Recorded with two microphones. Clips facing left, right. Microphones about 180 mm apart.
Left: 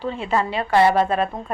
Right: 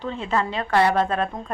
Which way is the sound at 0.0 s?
10° left (ahead or behind).